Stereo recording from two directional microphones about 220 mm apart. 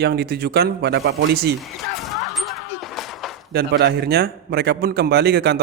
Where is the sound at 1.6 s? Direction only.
Centre (ahead or behind).